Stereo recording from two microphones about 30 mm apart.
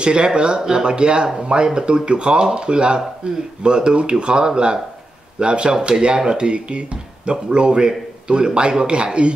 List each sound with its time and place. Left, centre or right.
0.0 s speech: right